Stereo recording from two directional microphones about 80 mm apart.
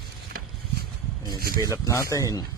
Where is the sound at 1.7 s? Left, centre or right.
Left.